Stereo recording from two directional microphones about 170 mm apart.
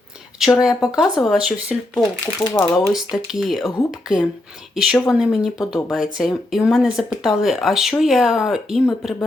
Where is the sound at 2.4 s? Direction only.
20° left (ahead or behind).